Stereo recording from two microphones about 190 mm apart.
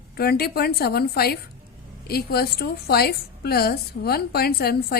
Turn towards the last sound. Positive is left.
turn(degrees=55)  # may be behind; listen again after turning